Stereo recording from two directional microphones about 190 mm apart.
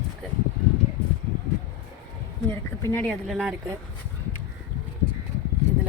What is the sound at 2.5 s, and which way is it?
Speech, 10° left (ahead or behind).